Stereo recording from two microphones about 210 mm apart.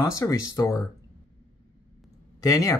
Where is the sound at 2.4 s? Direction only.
15° left (ahead or behind).